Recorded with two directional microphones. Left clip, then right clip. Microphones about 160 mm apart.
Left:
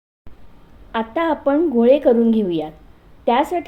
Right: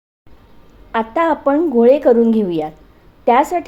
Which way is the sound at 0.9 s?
15° right (ahead or behind).